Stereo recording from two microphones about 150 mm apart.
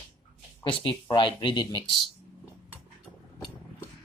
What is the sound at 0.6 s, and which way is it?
Speech, 35° left (ahead or behind).